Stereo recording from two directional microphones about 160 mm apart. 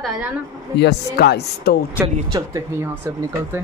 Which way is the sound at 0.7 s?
90° left.